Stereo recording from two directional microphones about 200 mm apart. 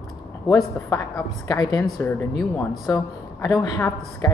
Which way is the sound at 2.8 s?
20° left (ahead or behind).